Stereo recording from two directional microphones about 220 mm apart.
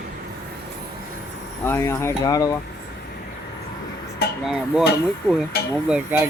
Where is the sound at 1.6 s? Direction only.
10° left (ahead or behind).